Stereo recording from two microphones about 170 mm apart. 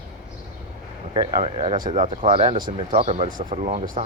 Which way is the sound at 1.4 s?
35° right (ahead or behind).